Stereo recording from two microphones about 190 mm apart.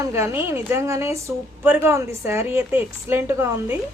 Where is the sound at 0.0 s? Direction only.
15° right (ahead or behind).